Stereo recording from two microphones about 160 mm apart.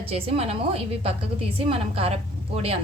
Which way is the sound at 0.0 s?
35° right (ahead or behind).